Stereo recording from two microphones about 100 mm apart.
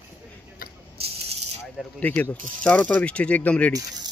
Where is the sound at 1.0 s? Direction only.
75° right (ahead or behind).